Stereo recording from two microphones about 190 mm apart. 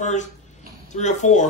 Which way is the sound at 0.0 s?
40° left (ahead or behind).